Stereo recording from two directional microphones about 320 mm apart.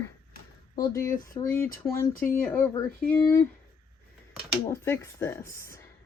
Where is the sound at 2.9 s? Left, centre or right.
Left.